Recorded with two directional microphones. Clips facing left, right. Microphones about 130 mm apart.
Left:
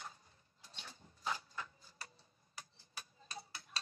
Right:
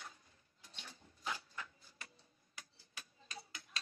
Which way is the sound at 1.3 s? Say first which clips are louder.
Left 3 dB; 35° left (ahead or behind).